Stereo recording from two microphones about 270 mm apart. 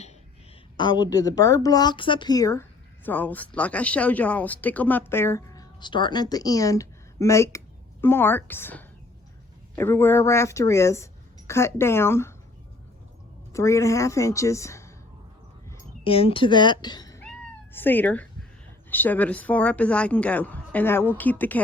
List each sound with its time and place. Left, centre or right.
0.8 s a woman's voice: centre
13.5 s a woman's voice: centre
17.2 s cat: centre
18.9 s speech: centre